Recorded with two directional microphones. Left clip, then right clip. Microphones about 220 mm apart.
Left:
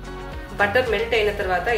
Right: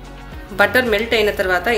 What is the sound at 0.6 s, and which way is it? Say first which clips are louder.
A woman's voice: right 5 dB; 50° right (ahead or behind).